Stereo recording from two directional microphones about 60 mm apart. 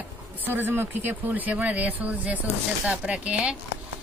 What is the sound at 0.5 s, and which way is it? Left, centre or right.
Speech, right.